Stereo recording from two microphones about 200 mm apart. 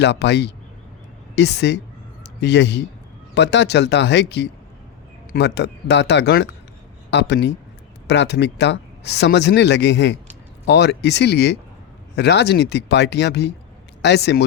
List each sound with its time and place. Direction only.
0.0 s speech: 60° left (ahead or behind)